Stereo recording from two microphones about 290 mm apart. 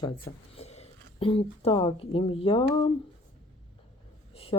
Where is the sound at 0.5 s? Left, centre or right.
Left.